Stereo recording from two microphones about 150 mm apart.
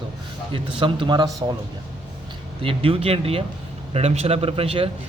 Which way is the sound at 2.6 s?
40° right (ahead or behind).